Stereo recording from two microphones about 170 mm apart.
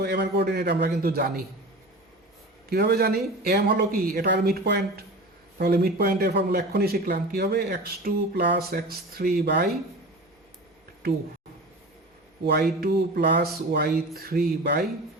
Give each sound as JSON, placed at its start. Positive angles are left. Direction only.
{"t": 0.0, "sound": "speech", "side_deg": -70}
{"t": 2.6, "sound": "speech", "side_deg": -75}
{"t": 5.5, "sound": "a man's voice", "side_deg": -65}
{"t": 12.5, "sound": "a man's voice", "side_deg": -70}